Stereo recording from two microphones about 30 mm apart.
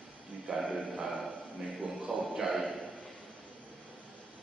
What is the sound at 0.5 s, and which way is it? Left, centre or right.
Speech, right.